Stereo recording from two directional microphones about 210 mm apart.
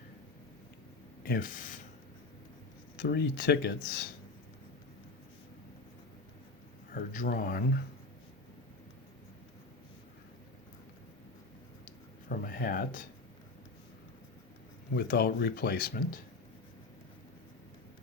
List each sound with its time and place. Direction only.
1.2 s speech: 45° left (ahead or behind)
3.0 s speech: 50° left (ahead or behind)
6.9 s speech: 40° left (ahead or behind)
12.3 s speech: 45° left (ahead or behind)
14.9 s speech: 50° left (ahead or behind)